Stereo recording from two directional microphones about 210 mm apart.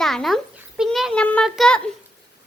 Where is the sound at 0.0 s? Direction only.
Centre (ahead or behind).